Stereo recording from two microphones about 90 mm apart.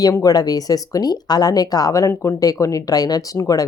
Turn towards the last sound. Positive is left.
turn(degrees=40)  # may be behind; listen again after turning